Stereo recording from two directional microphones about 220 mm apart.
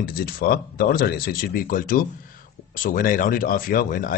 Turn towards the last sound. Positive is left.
turn(degrees=40)  # may be behind; listen again after turning